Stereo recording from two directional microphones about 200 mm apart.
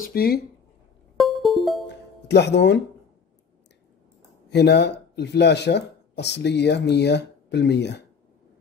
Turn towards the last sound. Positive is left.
turn(degrees=60)  # may be behind; listen again after turning